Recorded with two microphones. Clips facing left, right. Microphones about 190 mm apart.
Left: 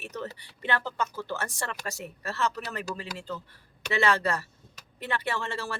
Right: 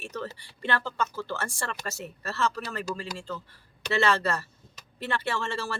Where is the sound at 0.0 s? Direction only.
15° left (ahead or behind).